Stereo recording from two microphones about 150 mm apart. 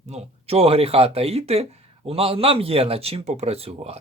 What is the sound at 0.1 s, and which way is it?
Speech, 45° right (ahead or behind).